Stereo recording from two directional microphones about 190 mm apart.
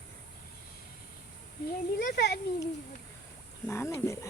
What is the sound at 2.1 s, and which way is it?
Speech, 60° left (ahead or behind).